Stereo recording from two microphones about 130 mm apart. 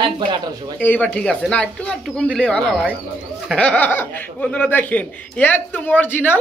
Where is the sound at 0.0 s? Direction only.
35° right (ahead or behind).